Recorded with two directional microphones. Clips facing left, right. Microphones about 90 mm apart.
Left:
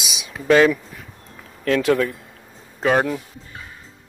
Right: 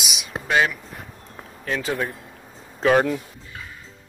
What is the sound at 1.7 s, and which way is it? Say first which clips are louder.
Speech: left 8 dB; 80° left.